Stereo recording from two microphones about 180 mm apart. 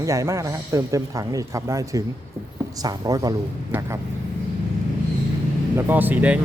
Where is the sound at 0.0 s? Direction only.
15° right (ahead or behind).